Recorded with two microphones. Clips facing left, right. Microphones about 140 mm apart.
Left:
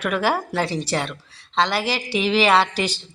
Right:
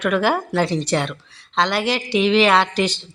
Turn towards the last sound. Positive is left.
turn(degrees=10)  # may be behind; listen again after turning